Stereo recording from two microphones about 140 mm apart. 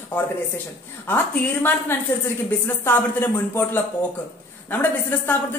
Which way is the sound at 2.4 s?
15° left (ahead or behind).